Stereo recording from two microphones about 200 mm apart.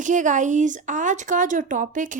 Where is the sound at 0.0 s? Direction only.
40° right (ahead or behind).